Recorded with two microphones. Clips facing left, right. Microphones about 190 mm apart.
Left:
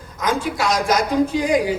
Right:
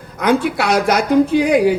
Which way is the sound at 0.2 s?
65° right (ahead or behind).